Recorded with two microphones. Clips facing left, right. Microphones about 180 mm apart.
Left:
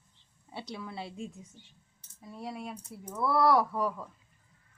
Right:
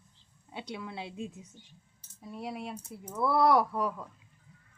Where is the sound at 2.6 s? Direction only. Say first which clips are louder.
Right 1 dB; centre (ahead or behind).